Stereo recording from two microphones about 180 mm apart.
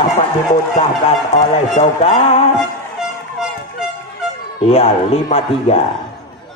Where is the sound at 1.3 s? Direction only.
35° left (ahead or behind).